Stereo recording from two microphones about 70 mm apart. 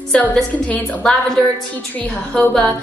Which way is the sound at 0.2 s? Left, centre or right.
Left.